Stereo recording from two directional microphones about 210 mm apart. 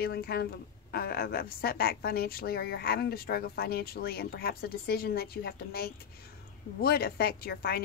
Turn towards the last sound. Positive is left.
turn(degrees=45)  # may be behind; listen again after turning